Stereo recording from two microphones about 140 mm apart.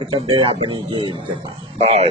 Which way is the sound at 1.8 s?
45° right (ahead or behind).